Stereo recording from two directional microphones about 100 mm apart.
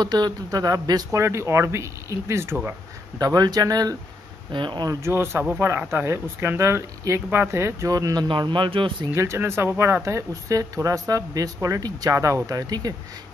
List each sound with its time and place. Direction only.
0.0 s speech: 45° right (ahead or behind); by 2.5 s 25° right (ahead or behind)
3.2 s speech: 40° right (ahead or behind)
4.5 s speech: 50° right (ahead or behind)
4.8 s speech: 25° right (ahead or behind)
8.3 s a man's voice: 55° right (ahead or behind)
9.1 s speech: 30° right (ahead or behind)